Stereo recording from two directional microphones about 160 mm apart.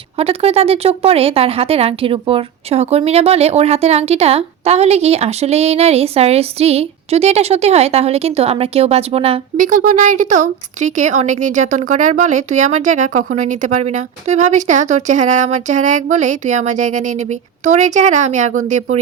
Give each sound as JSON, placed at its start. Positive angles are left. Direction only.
{"t": 0.2, "sound": "speech", "side_deg": -40}
{"t": 9.6, "sound": "a woman's voice", "side_deg": -50}